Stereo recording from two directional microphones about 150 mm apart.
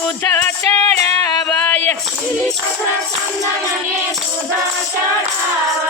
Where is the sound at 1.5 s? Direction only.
10° left (ahead or behind).